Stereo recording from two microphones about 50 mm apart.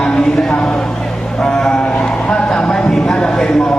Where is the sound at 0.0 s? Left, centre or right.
Centre.